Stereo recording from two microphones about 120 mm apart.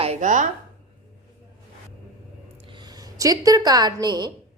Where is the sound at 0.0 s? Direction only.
75° right (ahead or behind).